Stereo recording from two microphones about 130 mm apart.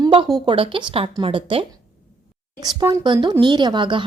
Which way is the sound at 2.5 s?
30° right (ahead or behind).